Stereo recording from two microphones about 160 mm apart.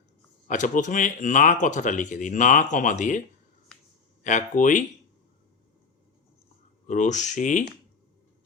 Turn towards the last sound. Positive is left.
turn(degrees=50)  # may be behind; listen again after turning